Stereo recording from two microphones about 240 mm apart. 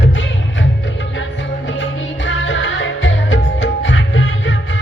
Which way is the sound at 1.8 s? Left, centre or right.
Left.